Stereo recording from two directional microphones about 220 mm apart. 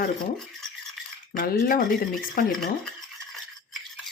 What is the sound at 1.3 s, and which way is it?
Speech, 40° left (ahead or behind).